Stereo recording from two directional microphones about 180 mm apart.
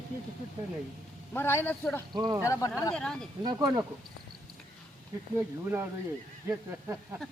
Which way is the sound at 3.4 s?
20° right (ahead or behind).